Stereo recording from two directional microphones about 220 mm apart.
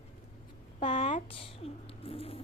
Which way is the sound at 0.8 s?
35° left (ahead or behind).